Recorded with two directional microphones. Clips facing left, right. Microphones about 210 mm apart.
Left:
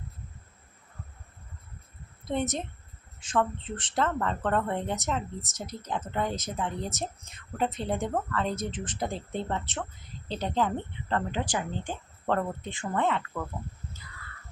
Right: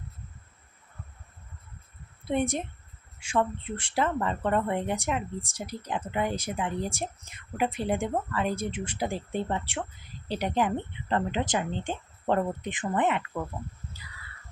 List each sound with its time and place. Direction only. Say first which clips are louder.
2.2 s a woman's voice: right 2 dB; 10° right (ahead or behind)